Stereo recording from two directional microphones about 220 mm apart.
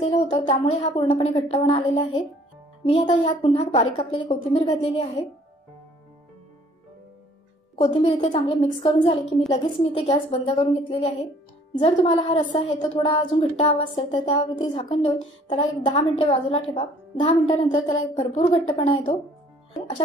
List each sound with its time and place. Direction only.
0.0 s a woman's voice: 20° left (ahead or behind)
7.7 s a woman's voice: 25° left (ahead or behind)